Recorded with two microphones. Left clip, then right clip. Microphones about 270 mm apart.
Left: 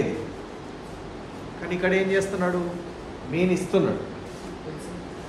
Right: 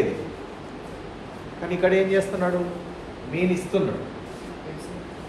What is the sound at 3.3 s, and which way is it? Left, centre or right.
Speech, centre.